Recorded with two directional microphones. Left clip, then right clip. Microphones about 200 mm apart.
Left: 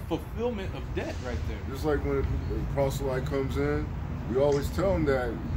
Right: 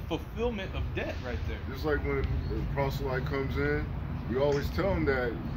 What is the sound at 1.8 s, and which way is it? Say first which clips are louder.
Speech: left 2 dB; 25° left (ahead or behind).